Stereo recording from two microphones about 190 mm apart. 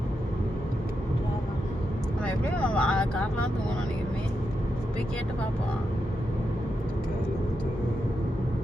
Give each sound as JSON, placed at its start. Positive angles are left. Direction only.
{"t": 2.2, "sound": "speech", "side_deg": 5}